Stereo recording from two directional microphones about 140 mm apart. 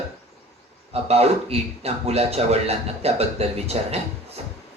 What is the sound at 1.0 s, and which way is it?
Speech, 45° right (ahead or behind).